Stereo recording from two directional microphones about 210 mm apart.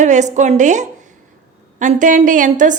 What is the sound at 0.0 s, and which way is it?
A woman's voice, 35° right (ahead or behind).